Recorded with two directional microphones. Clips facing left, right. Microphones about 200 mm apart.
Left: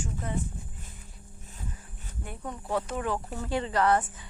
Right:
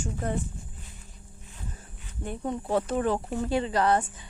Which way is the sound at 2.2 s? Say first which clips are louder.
Right 7 dB; 25° right (ahead or behind).